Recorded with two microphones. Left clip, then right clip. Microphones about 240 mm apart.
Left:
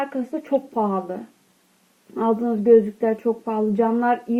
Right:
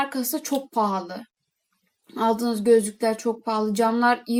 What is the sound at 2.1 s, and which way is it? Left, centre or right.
Speech, right.